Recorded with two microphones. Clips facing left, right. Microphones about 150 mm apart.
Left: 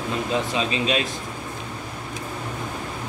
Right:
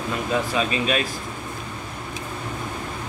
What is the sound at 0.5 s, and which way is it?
Speech, 25° left (ahead or behind).